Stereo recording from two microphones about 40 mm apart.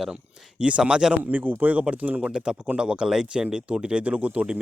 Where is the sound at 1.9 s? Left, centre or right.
Right.